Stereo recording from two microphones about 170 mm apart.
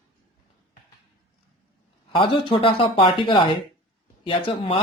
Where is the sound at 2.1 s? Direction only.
30° left (ahead or behind).